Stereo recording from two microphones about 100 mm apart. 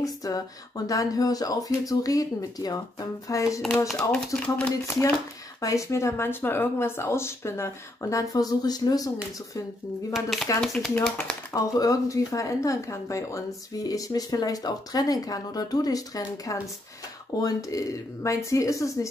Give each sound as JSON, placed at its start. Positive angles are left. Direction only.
{"t": 0.0, "sound": "speech", "side_deg": 35}
{"t": 3.6, "sound": "speech", "side_deg": 0}
{"t": 4.8, "sound": "speech", "side_deg": 25}
{"t": 10.6, "sound": "speech", "side_deg": 0}
{"t": 11.5, "sound": "speech", "side_deg": 35}